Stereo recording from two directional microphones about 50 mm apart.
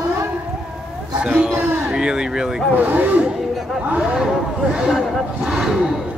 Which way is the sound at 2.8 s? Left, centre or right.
Right.